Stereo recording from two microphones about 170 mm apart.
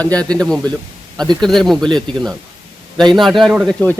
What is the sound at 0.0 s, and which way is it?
Speech, 5° left (ahead or behind).